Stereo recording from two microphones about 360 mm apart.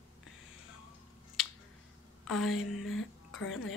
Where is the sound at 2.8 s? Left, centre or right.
Left.